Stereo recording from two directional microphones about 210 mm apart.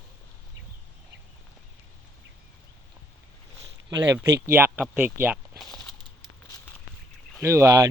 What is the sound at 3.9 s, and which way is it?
Speech, 15° right (ahead or behind).